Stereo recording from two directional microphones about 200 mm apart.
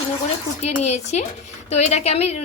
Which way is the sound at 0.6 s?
35° left (ahead or behind).